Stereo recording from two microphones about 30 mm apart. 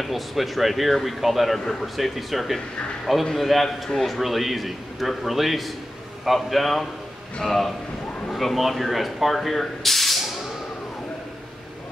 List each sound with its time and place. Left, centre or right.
0.0 s a man's voice: centre